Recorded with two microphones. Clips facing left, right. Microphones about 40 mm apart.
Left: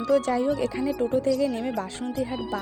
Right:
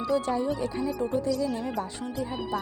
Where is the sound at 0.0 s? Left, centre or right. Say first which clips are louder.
Left 4 dB; left.